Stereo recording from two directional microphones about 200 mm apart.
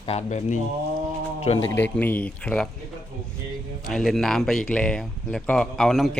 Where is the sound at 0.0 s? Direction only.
30° left (ahead or behind).